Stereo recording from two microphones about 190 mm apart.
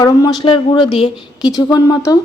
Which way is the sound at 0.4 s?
25° left (ahead or behind).